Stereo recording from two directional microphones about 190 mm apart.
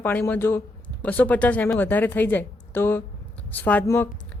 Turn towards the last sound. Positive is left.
turn(degrees=10)  # may be behind; listen again after turning